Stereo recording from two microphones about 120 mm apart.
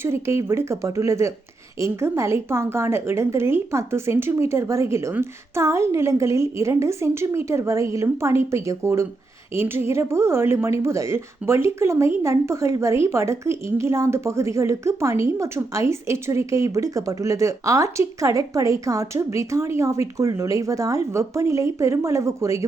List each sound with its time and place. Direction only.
0.0 s speech: 20° right (ahead or behind)